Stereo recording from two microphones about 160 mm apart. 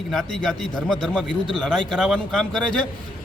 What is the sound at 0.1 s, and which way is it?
A man's voice, centre (ahead or behind).